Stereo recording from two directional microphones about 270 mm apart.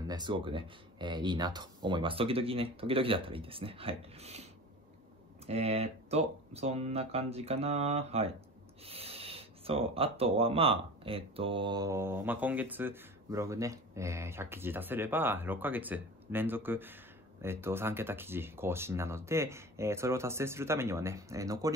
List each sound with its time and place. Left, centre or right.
0.1 s speech: centre
5.5 s speech: right